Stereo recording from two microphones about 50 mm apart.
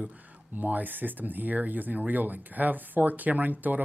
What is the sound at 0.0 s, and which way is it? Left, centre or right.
Speech, right.